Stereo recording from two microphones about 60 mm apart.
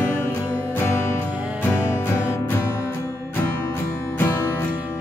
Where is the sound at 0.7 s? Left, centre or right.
Left.